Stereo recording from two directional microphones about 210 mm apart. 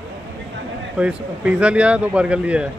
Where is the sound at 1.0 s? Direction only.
5° right (ahead or behind).